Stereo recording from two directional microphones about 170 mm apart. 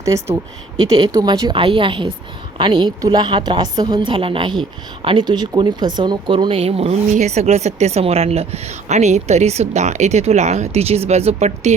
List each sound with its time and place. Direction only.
0.0 s a woman's voice: 20° right (ahead or behind); by 11.7 s 40° right (ahead or behind)